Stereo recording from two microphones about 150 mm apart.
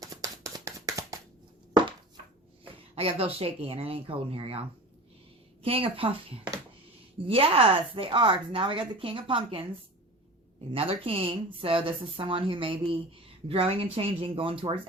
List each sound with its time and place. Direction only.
0.0 s a sound: 25° right (ahead or behind)
2.9 s speech: 40° right (ahead or behind)
5.6 s speech: 40° right (ahead or behind)
10.7 s speech: 40° right (ahead or behind)